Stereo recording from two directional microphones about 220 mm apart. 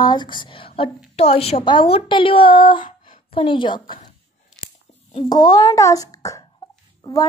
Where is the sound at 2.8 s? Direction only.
35° left (ahead or behind).